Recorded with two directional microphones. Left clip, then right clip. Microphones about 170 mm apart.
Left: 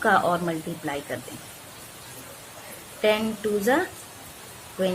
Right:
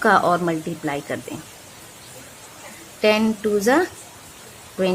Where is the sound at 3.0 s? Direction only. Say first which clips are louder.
Right 4 dB; 40° right (ahead or behind).